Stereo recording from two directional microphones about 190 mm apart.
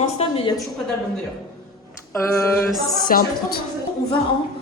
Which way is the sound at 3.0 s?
45° left (ahead or behind).